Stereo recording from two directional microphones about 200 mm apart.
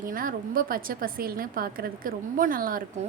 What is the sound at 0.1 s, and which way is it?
Speech, 45° right (ahead or behind).